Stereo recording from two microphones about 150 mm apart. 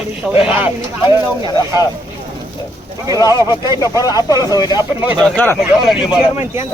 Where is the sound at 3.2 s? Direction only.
25° left (ahead or behind).